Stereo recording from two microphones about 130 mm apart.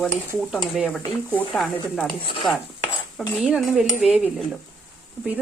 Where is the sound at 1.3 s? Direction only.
10° left (ahead or behind).